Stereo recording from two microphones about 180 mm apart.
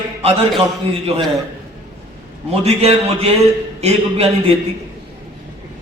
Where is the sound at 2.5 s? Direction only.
35° right (ahead or behind).